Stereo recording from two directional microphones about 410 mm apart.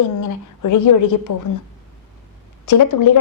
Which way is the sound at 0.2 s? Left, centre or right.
Left.